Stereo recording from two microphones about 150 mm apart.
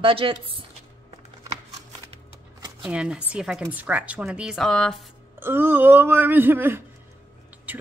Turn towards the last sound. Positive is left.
turn(degrees=-10)  # may be behind; listen again after turning